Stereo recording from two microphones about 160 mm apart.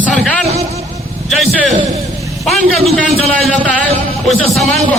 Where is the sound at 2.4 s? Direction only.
Centre (ahead or behind).